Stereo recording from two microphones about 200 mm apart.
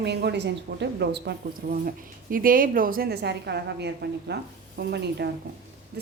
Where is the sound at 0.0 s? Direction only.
55° right (ahead or behind).